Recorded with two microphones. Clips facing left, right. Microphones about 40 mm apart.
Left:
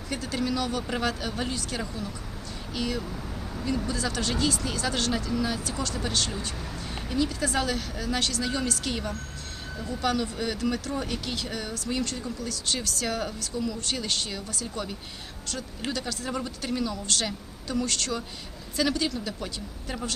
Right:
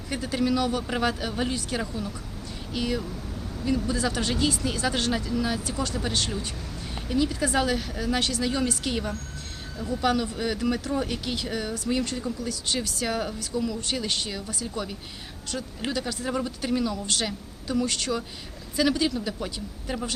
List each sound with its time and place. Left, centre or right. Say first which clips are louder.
0.1 s speech: right 3 dB; centre
5.3 s speech: right 1 dB; centre